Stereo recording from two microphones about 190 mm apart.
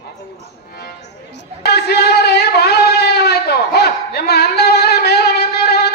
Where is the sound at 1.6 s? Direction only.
60° left (ahead or behind).